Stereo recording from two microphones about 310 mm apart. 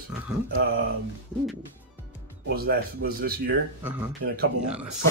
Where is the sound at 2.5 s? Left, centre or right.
Right.